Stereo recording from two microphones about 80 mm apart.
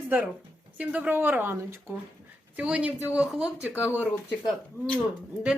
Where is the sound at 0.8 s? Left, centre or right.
Right.